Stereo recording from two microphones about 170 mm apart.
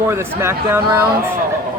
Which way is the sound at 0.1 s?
15° right (ahead or behind).